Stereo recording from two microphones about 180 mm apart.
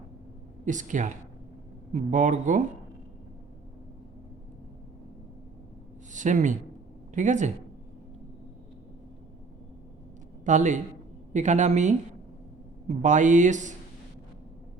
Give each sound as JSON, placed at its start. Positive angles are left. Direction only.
{"t": 0.6, "sound": "speech", "side_deg": -45}
{"t": 6.1, "sound": "speech", "side_deg": -45}
{"t": 10.4, "sound": "a woman's voice", "side_deg": -40}